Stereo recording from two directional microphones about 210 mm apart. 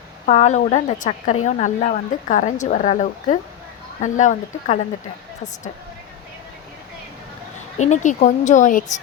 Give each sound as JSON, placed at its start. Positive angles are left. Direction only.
{"t": 0.3, "sound": "a woman's voice", "side_deg": 30}
{"t": 7.8, "sound": "a woman's voice", "side_deg": 35}